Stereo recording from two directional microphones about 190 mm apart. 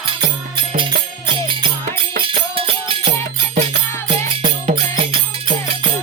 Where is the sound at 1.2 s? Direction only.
25° right (ahead or behind).